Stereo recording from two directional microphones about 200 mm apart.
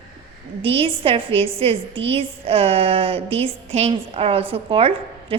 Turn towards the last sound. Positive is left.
turn(degrees=-25)  # may be behind; listen again after turning